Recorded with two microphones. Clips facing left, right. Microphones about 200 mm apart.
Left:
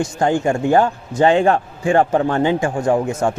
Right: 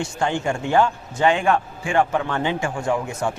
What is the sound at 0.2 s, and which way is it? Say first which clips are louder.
A man's voice: left 6 dB; 40° left (ahead or behind).